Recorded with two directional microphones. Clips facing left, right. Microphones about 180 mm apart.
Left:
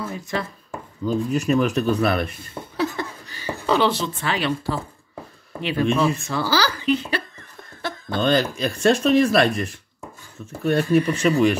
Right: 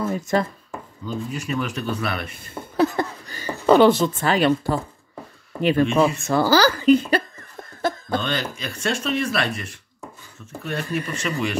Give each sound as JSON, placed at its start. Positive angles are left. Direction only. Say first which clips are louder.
{"t": 0.0, "sound": "speech", "louder": "right 6 dB", "side_deg": -40}
{"t": 1.0, "sound": "speech", "louder": "left 8 dB", "side_deg": 45}
{"t": 2.8, "sound": "a sound", "louder": "right 5 dB", "side_deg": -45}
{"t": 5.6, "sound": "speech", "louder": "right 3 dB", "side_deg": -45}
{"t": 8.2, "sound": "speech", "louder": "left 7 dB", "side_deg": 40}